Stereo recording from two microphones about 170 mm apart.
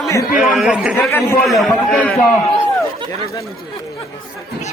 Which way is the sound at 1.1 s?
15° left (ahead or behind).